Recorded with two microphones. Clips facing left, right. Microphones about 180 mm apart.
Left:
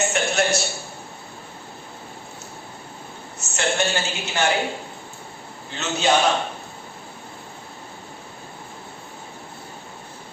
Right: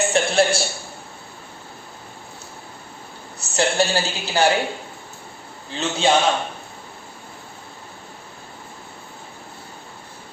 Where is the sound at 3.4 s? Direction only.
35° right (ahead or behind).